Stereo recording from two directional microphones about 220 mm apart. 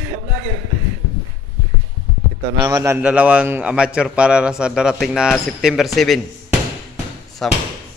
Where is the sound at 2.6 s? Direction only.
15° right (ahead or behind); by 6.2 s centre (ahead or behind).